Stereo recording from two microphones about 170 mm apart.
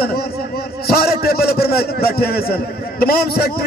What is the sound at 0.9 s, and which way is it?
A man's voice, 65° left (ahead or behind).